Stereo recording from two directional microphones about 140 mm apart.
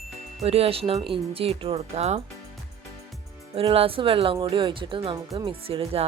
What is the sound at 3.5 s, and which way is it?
Speech, 45° right (ahead or behind).